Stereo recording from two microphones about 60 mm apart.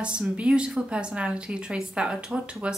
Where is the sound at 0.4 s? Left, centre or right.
Centre.